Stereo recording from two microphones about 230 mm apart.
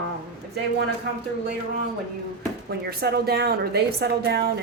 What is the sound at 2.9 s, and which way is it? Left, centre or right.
A woman's voice, right.